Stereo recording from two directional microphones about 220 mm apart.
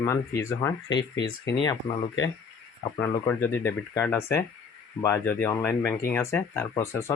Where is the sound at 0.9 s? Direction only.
55° left (ahead or behind).